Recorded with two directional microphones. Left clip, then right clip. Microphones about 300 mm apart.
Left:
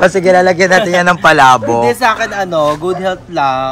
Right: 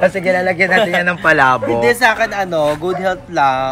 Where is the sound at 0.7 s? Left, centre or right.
Centre.